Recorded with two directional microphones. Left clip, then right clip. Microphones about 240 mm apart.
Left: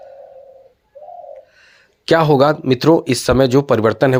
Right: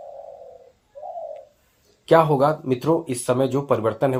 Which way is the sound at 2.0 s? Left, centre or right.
Left.